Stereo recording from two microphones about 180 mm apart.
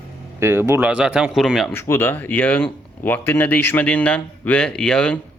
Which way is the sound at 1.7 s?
15° left (ahead or behind).